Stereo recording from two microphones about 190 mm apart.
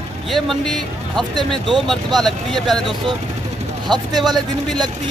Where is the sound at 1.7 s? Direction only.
Centre (ahead or behind).